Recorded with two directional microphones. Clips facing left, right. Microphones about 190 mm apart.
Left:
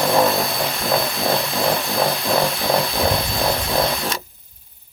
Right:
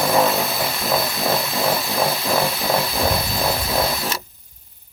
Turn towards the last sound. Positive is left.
turn(degrees=-5)  # may be behind; listen again after turning